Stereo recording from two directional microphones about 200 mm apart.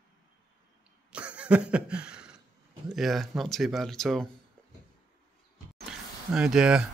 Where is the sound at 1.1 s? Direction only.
5° right (ahead or behind).